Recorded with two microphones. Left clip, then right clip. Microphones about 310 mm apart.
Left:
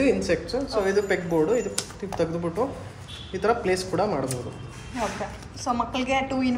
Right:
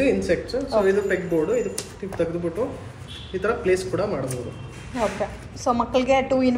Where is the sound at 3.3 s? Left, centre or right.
Left.